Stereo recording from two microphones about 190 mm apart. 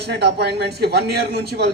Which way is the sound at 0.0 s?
60° right (ahead or behind).